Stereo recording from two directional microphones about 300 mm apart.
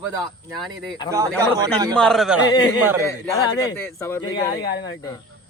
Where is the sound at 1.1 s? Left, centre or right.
Centre.